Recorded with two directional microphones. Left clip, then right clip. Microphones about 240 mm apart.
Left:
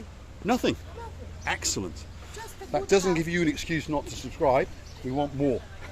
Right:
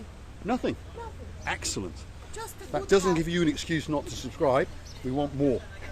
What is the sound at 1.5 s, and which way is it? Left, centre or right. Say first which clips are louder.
Speech: left 3 dB; centre.